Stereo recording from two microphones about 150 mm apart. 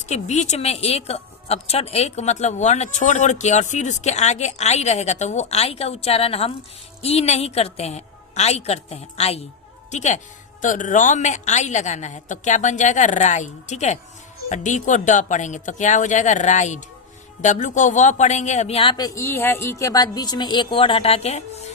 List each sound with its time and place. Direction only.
0.0 s a woman's voice: 50° left (ahead or behind)
18.9 s a woman's voice: 20° left (ahead or behind); by 21.4 s 45° left (ahead or behind)